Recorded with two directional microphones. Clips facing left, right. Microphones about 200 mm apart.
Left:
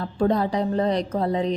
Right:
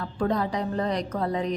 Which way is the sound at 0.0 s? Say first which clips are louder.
Left 4 dB; 30° left (ahead or behind).